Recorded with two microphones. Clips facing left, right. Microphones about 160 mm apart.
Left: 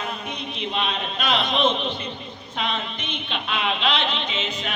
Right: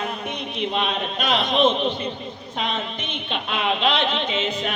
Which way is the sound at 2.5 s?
45° right (ahead or behind).